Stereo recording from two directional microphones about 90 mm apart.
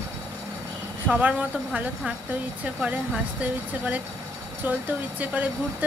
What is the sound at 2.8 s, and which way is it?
Speech, 15° right (ahead or behind).